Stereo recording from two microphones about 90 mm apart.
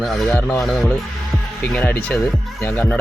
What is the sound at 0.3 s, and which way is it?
Speech, 15° left (ahead or behind).